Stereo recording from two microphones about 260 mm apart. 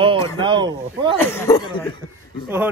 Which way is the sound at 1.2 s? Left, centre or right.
Centre.